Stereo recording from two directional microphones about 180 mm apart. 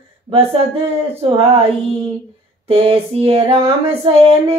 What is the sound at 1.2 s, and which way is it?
Female singing, 30° right (ahead or behind).